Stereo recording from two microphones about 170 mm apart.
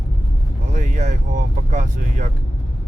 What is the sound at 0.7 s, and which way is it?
Speech, 45° right (ahead or behind).